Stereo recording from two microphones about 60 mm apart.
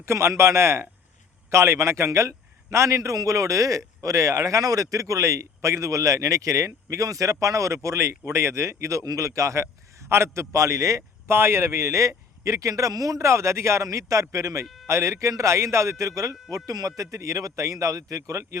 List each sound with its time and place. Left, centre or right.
0.0 s a man's voice: right
11.3 s a man's voice: right
16.6 s speech: right
17.0 s a man's voice: right